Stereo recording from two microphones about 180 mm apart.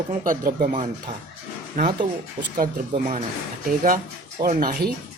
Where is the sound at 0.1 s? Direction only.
50° right (ahead or behind).